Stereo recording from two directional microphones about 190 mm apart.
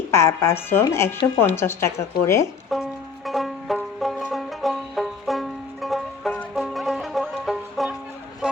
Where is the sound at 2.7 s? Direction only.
Centre (ahead or behind).